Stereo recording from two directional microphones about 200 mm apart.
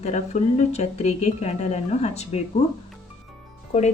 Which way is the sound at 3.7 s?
35° left (ahead or behind).